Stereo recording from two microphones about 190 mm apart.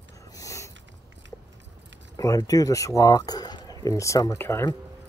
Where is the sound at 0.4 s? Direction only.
15° left (ahead or behind).